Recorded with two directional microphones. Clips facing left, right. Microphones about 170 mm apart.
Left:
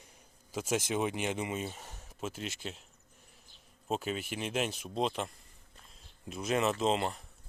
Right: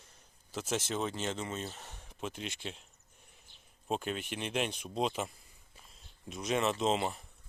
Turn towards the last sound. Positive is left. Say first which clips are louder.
# left 1 dB
turn(degrees=0)  # may be behind; listen again after turning